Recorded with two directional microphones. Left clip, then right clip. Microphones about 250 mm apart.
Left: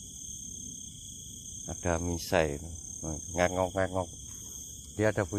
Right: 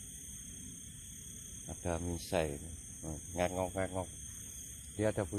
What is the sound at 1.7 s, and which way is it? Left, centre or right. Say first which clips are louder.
Speech: left 7 dB; centre.